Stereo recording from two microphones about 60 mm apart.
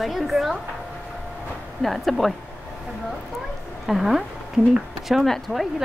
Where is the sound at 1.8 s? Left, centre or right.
Centre.